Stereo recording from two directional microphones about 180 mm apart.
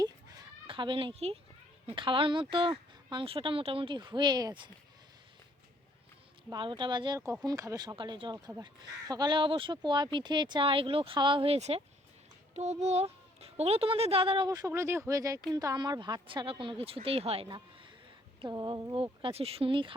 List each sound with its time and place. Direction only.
0.0 s a sound: 20° right (ahead or behind)
1.9 s speech: 30° right (ahead or behind)
6.5 s speech: 25° right (ahead or behind)
19.2 s speech: 35° right (ahead or behind)